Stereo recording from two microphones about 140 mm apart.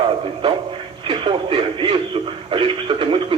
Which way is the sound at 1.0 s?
40° right (ahead or behind).